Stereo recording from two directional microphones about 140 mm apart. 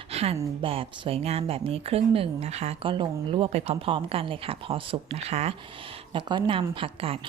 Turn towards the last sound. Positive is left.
turn(degrees=-40)  # may be behind; listen again after turning